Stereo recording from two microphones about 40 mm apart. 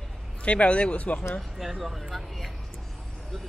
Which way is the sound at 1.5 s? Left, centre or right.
Centre.